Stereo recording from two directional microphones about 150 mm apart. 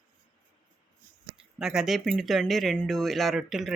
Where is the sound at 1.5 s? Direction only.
5° right (ahead or behind).